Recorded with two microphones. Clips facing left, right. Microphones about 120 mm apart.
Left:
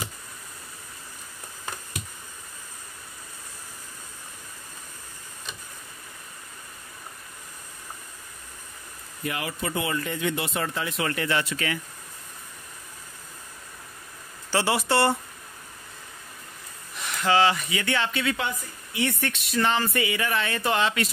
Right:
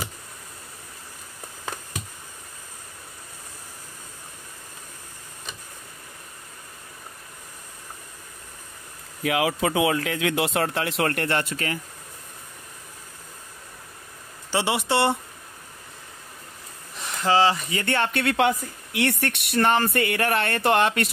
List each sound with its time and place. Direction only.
9.2 s speech: 90° right; by 11.8 s 40° right (ahead or behind)
14.5 s speech: 20° right (ahead or behind)
17.0 s speech: 30° right (ahead or behind)
17.8 s speech: 55° right (ahead or behind)